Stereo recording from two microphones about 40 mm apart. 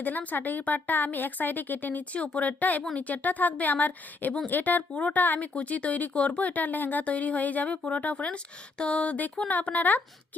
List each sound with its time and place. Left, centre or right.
0.0 s a woman's voice: left
2.1 s a woman's voice: left
7.0 s a woman's voice: left